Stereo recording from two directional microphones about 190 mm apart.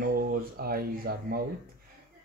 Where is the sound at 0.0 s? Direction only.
50° right (ahead or behind).